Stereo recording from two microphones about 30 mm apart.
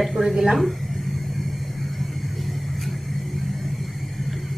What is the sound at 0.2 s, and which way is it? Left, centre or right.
Speech, centre.